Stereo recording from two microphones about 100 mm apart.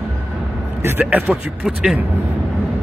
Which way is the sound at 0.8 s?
25° right (ahead or behind).